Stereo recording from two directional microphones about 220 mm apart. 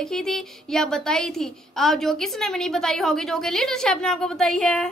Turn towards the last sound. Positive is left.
turn(degrees=0)  # may be behind; listen again after turning